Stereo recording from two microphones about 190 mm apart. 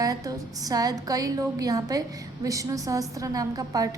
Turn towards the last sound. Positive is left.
turn(degrees=-20)  # may be behind; listen again after turning